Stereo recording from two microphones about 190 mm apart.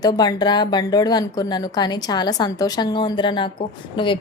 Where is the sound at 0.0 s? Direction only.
20° left (ahead or behind).